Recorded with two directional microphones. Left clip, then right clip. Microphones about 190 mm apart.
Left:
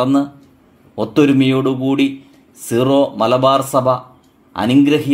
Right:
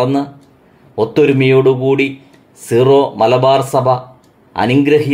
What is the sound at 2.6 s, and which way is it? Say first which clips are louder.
Speech: right 4 dB; 30° left (ahead or behind).